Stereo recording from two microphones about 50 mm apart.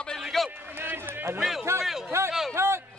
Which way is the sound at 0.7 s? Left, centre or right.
Right.